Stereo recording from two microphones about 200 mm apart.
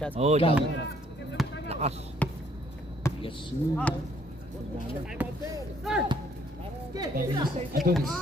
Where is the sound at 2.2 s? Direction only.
5° left (ahead or behind).